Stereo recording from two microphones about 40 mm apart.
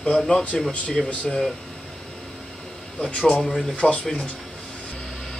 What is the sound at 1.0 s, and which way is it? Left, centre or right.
Speech, centre.